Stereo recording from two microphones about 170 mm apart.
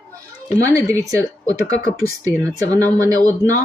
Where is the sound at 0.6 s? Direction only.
20° right (ahead or behind).